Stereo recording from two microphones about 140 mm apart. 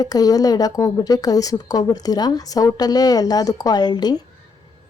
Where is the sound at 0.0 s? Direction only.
25° left (ahead or behind).